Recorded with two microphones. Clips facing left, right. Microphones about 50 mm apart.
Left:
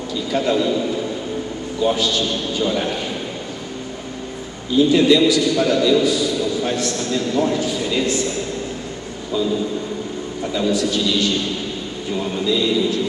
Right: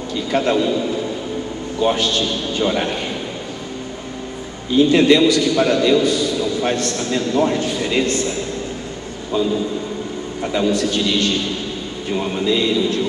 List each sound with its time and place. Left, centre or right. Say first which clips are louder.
0.1 s a sound: right 2 dB; right
1.8 s a man's voice: right 1 dB; right
4.7 s a man's voice: right 1 dB; right
10.4 s a man's voice: right 2 dB; right